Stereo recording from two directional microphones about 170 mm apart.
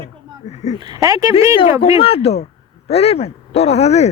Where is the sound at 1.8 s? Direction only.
35° left (ahead or behind).